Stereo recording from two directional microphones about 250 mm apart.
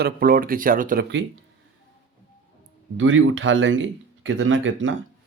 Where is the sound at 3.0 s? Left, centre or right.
Right.